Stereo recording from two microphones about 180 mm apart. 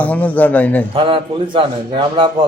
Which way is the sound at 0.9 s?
30° right (ahead or behind).